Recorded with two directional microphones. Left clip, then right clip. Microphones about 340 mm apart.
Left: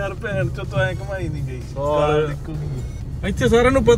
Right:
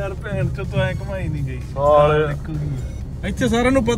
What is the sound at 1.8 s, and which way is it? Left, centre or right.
Speech, centre.